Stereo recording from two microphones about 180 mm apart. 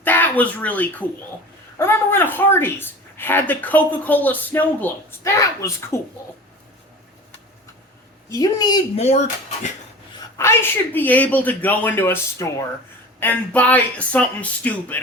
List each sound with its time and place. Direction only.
0.0 s speech: 10° left (ahead or behind)
8.3 s a woman's voice: 20° left (ahead or behind)
10.3 s speech: 15° left (ahead or behind)